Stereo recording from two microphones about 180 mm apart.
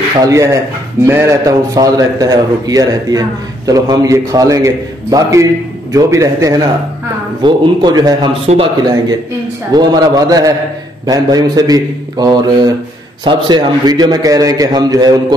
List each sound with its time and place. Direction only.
0.2 s a man's voice: 15° right (ahead or behind)
8.5 s a man's voice: 40° right (ahead or behind)
9.8 s a man's voice: 20° right (ahead or behind)